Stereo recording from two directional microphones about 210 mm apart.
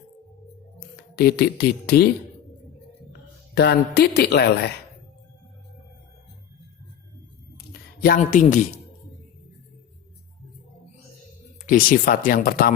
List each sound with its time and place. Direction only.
1.1 s speech: 45° left (ahead or behind)
3.5 s speech: 50° left (ahead or behind)
8.0 s speech: 40° left (ahead or behind)
11.6 s speech: 40° left (ahead or behind)